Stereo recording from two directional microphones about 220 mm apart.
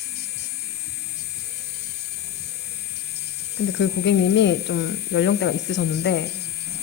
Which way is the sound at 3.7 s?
50° left (ahead or behind).